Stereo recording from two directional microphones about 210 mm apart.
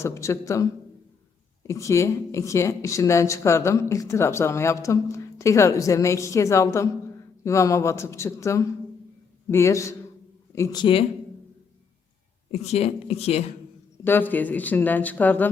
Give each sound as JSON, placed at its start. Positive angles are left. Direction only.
{"t": 0.0, "sound": "speech", "side_deg": 15}
{"t": 12.5, "sound": "a woman's voice", "side_deg": 30}
{"t": 14.0, "sound": "speech", "side_deg": 10}